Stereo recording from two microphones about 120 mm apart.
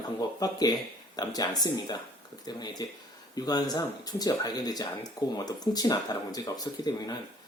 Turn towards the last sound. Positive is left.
turn(degrees=35)  # may be behind; listen again after turning